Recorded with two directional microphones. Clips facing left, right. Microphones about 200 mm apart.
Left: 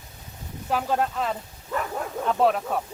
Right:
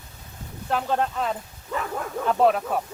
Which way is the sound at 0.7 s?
5° left (ahead or behind).